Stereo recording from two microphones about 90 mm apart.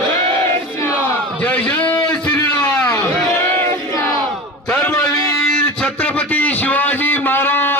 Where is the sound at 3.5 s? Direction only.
25° left (ahead or behind).